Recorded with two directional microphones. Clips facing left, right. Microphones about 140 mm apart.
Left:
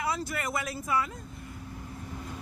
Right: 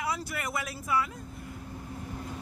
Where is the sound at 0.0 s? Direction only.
10° right (ahead or behind).